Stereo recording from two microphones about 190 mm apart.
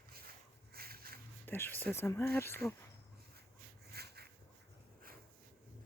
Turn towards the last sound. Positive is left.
turn(degrees=-55)  # may be behind; listen again after turning